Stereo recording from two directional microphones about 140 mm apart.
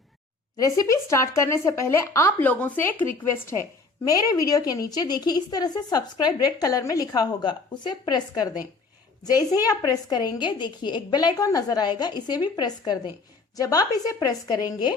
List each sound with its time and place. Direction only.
0.5 s a woman's voice: 25° left (ahead or behind)